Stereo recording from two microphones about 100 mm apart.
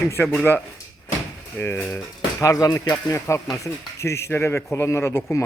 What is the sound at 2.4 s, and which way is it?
Speech, 35° left (ahead or behind).